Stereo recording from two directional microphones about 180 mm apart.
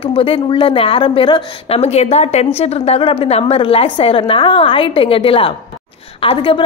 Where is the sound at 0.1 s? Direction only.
30° left (ahead or behind).